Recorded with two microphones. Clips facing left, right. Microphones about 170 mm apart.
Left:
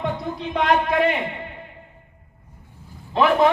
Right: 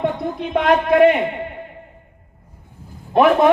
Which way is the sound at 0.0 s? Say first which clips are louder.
Right 5 dB; 50° right (ahead or behind).